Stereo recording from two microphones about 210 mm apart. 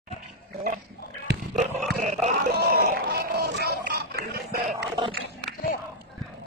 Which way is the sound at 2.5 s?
45° right (ahead or behind).